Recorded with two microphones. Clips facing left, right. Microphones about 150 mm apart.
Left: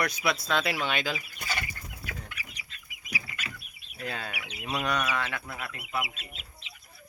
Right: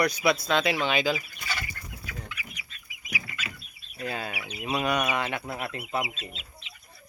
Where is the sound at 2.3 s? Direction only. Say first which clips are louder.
Right 2 dB; 50° left (ahead or behind).